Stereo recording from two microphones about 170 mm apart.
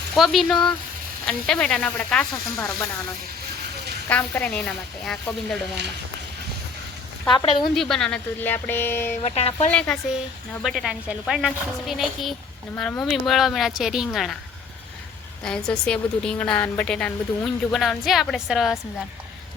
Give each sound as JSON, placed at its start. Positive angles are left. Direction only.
{"t": 0.1, "sound": "a woman's voice", "side_deg": 0}
{"t": 4.1, "sound": "a woman's voice", "side_deg": 10}
{"t": 7.3, "sound": "speech", "side_deg": 25}
{"t": 7.8, "sound": "speech", "side_deg": 5}
{"t": 9.2, "sound": "speech", "side_deg": 35}
{"t": 9.7, "sound": "a woman's voice", "side_deg": 5}
{"t": 12.7, "sound": "a woman's voice", "side_deg": 10}
{"t": 15.4, "sound": "a woman's voice", "side_deg": 5}